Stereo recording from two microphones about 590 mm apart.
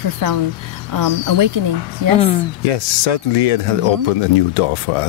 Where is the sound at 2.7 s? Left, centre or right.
Left.